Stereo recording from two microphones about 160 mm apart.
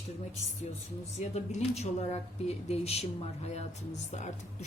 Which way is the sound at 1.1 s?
45° left (ahead or behind).